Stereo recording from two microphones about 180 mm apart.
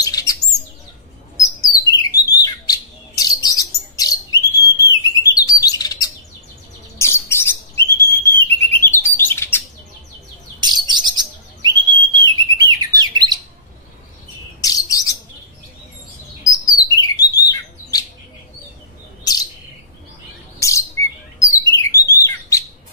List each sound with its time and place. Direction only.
0.0 s chirp: 20° left (ahead or behind)
1.4 s bird: 20° left (ahead or behind)
5.3 s chirp: 20° left (ahead or behind)
7.0 s bird: 15° left (ahead or behind)
10.6 s bird: 25° right (ahead or behind)
14.6 s bird: 20° left (ahead or behind)
16.8 s bird: 20° left (ahead or behind)
20.5 s bird: 15° left (ahead or behind)